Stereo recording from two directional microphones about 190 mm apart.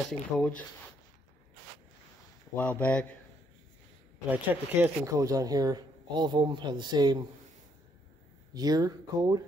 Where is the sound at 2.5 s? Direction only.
10° left (ahead or behind).